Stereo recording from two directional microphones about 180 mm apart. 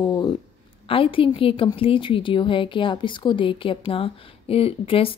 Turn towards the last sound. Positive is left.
turn(degrees=30)  # may be behind; listen again after turning